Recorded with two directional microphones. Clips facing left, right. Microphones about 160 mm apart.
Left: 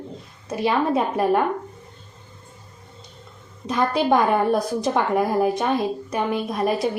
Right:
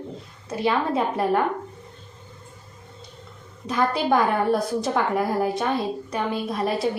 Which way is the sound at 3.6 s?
20° left (ahead or behind).